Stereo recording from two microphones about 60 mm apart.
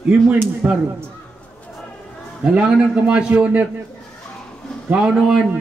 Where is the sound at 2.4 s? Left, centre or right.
Centre.